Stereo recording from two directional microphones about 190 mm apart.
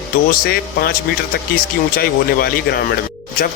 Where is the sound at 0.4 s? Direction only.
55° left (ahead or behind).